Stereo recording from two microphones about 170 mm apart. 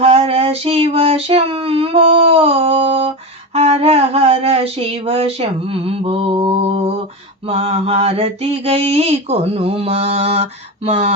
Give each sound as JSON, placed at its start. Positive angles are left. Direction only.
{"t": 0.0, "sound": "female singing", "side_deg": -35}
{"t": 3.5, "sound": "mantra", "side_deg": -40}